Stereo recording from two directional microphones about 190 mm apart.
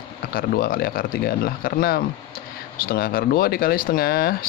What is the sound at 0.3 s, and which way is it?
Speech, 50° left (ahead or behind).